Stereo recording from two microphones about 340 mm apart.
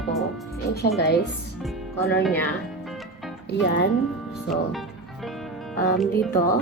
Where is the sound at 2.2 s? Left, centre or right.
Centre.